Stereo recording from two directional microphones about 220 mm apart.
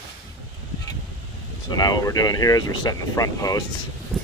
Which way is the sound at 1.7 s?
20° left (ahead or behind).